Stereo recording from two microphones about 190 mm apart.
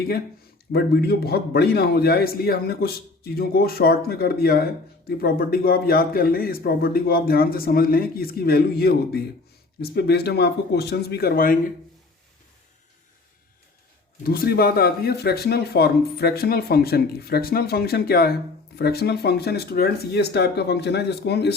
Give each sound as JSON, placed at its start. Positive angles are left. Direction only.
{"t": 0.7, "sound": "a man's voice", "side_deg": 55}
{"t": 14.3, "sound": "speech", "side_deg": 55}